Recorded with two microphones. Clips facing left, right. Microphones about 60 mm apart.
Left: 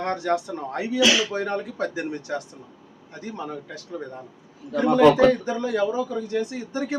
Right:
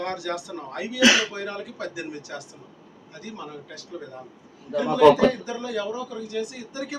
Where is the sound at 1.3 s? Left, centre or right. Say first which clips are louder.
Left 6 dB; left.